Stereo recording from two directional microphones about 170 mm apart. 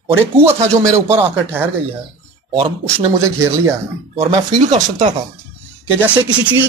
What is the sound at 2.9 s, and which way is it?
Speech, 15° right (ahead or behind).